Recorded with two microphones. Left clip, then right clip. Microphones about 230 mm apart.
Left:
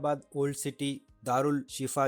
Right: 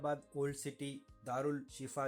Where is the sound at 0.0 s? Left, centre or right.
Left.